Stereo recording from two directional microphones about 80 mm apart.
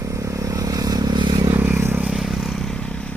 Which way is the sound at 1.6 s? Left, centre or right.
Right.